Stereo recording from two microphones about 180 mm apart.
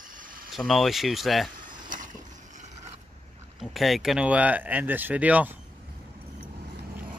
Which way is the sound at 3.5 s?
Centre (ahead or behind).